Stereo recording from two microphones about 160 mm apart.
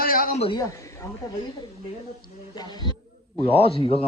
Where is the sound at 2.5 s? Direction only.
25° left (ahead or behind).